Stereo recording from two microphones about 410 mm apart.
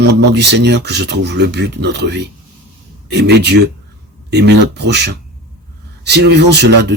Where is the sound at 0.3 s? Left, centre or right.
Right.